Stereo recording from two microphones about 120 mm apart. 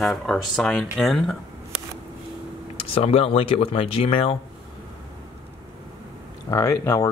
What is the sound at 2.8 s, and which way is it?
Speech, 50° left (ahead or behind).